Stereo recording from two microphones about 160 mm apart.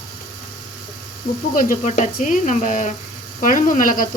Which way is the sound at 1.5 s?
50° left (ahead or behind).